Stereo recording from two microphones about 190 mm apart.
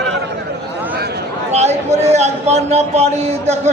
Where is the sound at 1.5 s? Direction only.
35° right (ahead or behind).